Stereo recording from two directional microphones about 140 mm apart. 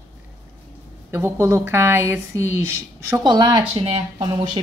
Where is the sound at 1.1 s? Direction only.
20° right (ahead or behind).